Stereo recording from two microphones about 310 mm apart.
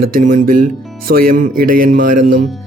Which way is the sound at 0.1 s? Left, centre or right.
Right.